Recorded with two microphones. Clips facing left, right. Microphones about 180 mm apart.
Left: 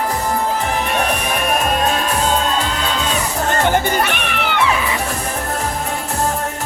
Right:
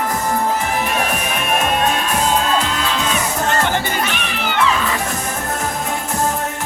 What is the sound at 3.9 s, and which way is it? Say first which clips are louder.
Music: left 3 dB; 60° left (ahead or behind).